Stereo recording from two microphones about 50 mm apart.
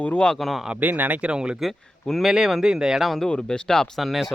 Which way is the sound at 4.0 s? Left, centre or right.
Centre.